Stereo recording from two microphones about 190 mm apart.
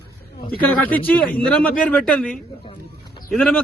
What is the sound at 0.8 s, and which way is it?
A man's voice, 10° left (ahead or behind).